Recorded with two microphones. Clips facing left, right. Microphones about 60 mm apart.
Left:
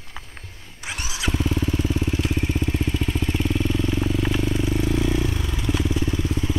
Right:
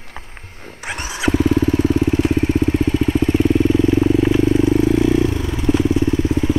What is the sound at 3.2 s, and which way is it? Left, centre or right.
Vehicle, right.